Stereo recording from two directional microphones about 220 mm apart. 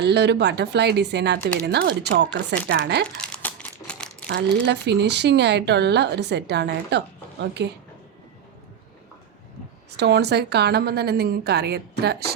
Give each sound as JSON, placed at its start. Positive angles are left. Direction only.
{"t": 0.0, "sound": "a woman's voice", "side_deg": -50}
{"t": 3.2, "sound": "crumpling", "side_deg": 5}
{"t": 4.3, "sound": "a woman's voice", "side_deg": -45}
{"t": 10.0, "sound": "a woman's voice", "side_deg": -50}